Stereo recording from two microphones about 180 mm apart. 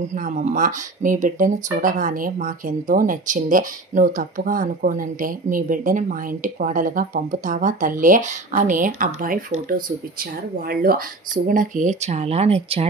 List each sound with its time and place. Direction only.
0.0 s speech: 45° right (ahead or behind)